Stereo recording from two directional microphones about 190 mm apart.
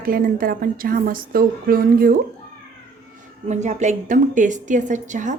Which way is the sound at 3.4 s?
35° right (ahead or behind).